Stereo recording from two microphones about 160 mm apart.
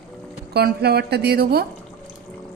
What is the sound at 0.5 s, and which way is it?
A woman's voice, 90° right.